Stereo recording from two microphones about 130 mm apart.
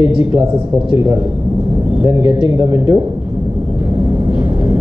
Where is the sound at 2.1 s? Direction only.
40° left (ahead or behind).